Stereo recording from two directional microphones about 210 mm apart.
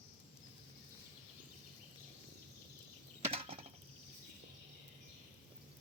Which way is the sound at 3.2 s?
25° right (ahead or behind).